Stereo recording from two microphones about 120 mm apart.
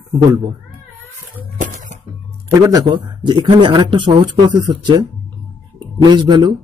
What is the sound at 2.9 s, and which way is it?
A man's voice, 40° right (ahead or behind).